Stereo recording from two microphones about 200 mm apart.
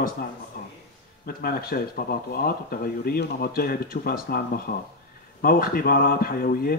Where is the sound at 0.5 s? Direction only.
50° left (ahead or behind).